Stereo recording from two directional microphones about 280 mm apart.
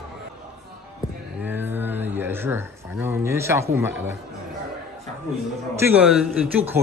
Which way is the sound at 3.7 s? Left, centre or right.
Centre.